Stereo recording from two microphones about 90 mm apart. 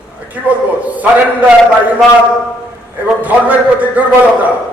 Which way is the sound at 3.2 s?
15° right (ahead or behind).